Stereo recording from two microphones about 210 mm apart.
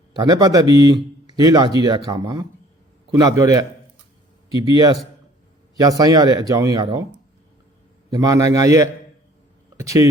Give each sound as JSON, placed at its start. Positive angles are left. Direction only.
{"t": 0.2, "sound": "speech", "side_deg": -15}
{"t": 4.7, "sound": "speech", "side_deg": -15}
{"t": 8.1, "sound": "speech", "side_deg": -15}